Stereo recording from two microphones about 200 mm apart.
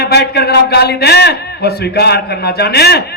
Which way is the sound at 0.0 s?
55° left (ahead or behind).